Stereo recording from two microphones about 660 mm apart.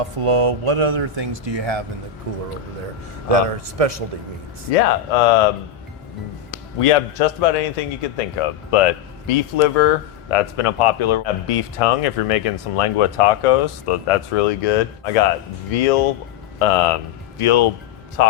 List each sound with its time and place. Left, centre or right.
0.0 s speech: right
3.3 s speech: right
4.7 s speech: left
6.7 s speech: left
18.2 s a man's voice: left